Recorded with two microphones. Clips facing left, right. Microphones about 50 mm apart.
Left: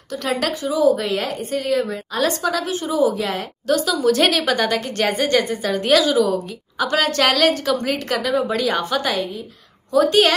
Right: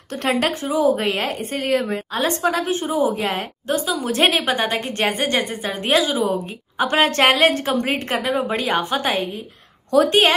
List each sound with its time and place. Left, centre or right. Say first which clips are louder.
0.1 s a woman's voice: right 2 dB; right